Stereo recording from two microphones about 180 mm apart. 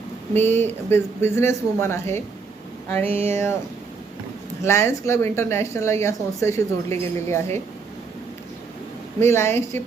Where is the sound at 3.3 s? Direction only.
15° left (ahead or behind).